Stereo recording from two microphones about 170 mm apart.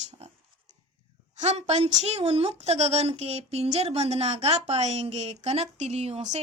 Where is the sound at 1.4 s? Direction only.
40° right (ahead or behind).